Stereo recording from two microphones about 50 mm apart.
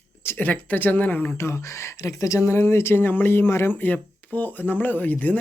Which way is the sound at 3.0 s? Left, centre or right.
Left.